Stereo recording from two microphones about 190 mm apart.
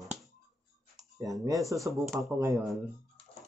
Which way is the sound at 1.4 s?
15° right (ahead or behind).